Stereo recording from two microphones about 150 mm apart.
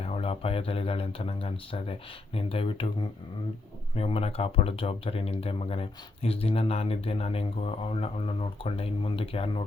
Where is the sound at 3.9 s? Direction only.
40° left (ahead or behind).